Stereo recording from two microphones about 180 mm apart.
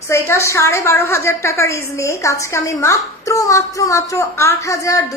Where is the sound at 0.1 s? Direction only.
15° left (ahead or behind).